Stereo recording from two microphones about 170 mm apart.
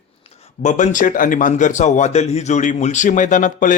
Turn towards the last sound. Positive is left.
turn(degrees=50)  # may be behind; listen again after turning